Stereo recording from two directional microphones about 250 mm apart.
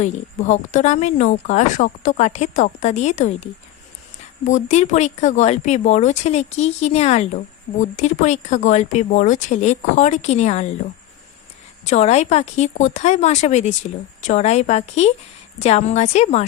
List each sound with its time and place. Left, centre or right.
0.0 s speech: left
11.9 s speech: left